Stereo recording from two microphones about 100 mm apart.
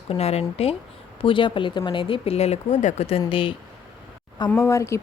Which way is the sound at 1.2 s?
55° left (ahead or behind).